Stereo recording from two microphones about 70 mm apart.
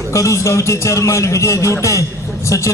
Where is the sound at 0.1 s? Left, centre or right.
Left.